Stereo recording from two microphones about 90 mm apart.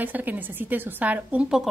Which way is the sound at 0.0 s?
20° right (ahead or behind).